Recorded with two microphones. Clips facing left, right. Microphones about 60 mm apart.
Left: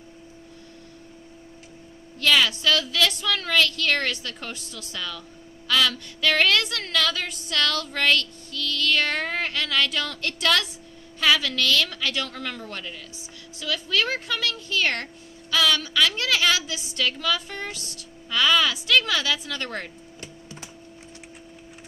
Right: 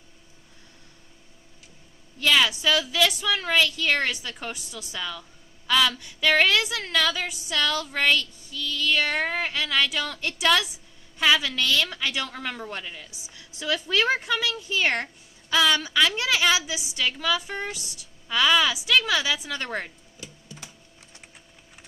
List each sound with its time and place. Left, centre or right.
2.1 s speech: centre